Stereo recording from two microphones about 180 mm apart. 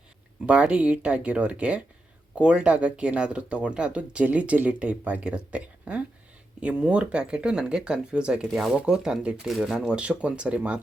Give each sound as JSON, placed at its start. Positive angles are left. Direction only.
{"t": 0.4, "sound": "speech", "side_deg": -5}